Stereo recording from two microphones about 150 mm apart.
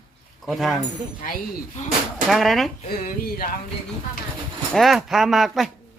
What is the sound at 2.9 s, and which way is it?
Speech, 85° left.